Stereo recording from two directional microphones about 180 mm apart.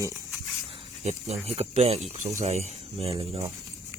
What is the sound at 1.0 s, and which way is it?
Speech, 40° right (ahead or behind).